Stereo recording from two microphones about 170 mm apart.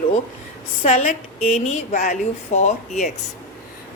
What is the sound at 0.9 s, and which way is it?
A woman's voice, 40° left (ahead or behind).